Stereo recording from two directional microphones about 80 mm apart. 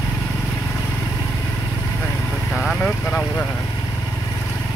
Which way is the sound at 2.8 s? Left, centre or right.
Centre.